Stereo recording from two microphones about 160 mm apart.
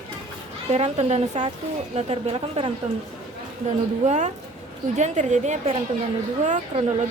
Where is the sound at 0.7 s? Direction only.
45° right (ahead or behind).